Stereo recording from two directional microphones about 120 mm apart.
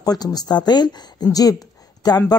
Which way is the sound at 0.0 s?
30° left (ahead or behind).